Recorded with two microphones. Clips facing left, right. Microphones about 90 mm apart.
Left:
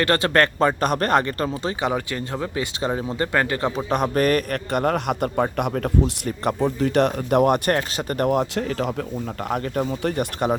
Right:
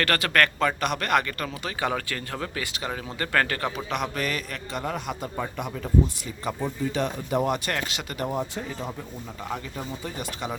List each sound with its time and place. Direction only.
0.0 s speech: 25° left (ahead or behind)
1.9 s speech: 20° left (ahead or behind)
3.8 s a man's voice: 40° left (ahead or behind)
8.2 s speech: 70° left (ahead or behind)
9.5 s a man's voice: 60° left (ahead or behind)